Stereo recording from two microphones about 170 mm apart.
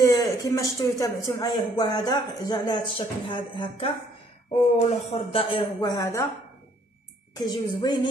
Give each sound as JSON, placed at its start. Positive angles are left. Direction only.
{"t": 0.0, "sound": "a sound", "side_deg": 20}
{"t": 0.4, "sound": "speech", "side_deg": 20}
{"t": 7.3, "sound": "speech", "side_deg": 25}